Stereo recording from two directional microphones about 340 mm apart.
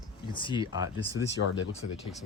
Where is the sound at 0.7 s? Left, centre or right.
Centre.